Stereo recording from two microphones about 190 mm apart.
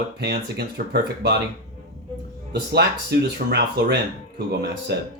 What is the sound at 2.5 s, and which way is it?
Speech, 60° right (ahead or behind).